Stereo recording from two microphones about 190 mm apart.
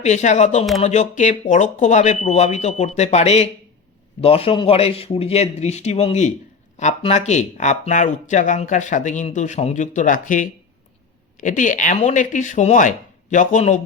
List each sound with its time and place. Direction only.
0.0 s speech: 35° left (ahead or behind)